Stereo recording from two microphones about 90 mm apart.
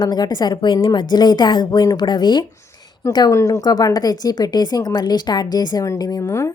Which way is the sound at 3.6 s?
45° left (ahead or behind).